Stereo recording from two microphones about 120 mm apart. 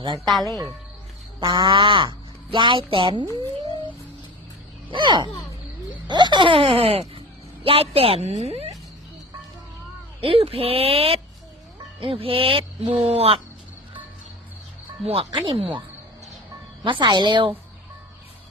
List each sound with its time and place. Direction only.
0.3 s speech: centre (ahead or behind)
1.4 s speech: 45° right (ahead or behind)
4.9 s a woman's voice: 40° right (ahead or behind); by 8.7 s 60° right (ahead or behind)
10.2 s speech: 50° right (ahead or behind)
15.0 s speech: 55° right (ahead or behind)
16.8 s a woman's voice: 40° right (ahead or behind)